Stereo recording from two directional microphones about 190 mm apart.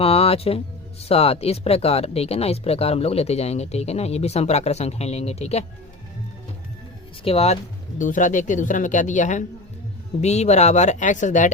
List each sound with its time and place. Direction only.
0.0 s speech: 30° left (ahead or behind)
7.3 s speech: 30° left (ahead or behind)